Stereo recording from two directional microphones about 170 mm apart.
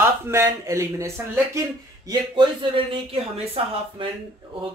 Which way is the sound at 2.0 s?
25° right (ahead or behind).